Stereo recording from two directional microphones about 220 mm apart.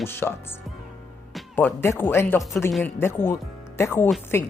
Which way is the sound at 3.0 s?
10° left (ahead or behind).